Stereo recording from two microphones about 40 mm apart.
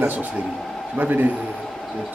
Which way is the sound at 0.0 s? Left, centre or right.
Right.